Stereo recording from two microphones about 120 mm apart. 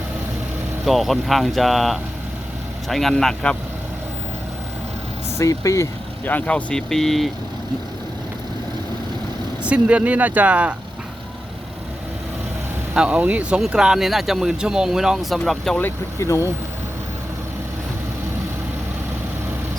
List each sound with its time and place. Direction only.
0.9 s speech: centre (ahead or behind)
5.4 s speech: 25° left (ahead or behind)
6.2 s speech: 15° left (ahead or behind)
9.6 s speech: 10° right (ahead or behind)
12.9 s speech: 10° right (ahead or behind)
15.8 s speech: 25° left (ahead or behind)